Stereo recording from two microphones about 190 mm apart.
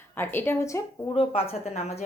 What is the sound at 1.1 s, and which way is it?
Speech, 30° left (ahead or behind).